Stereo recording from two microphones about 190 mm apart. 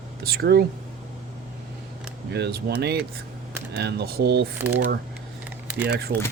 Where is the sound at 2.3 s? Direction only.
60° right (ahead or behind).